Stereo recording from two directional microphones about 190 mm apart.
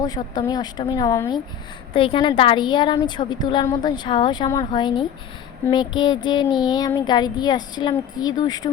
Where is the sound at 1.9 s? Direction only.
30° left (ahead or behind).